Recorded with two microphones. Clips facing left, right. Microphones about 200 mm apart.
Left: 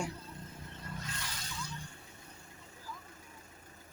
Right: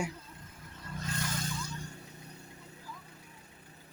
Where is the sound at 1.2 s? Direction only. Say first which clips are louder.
Right 8 dB; 50° right (ahead or behind).